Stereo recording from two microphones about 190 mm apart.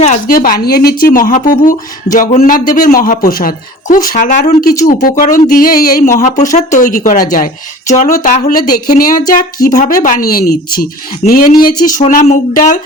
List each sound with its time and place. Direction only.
0.0 s speech: 45° left (ahead or behind)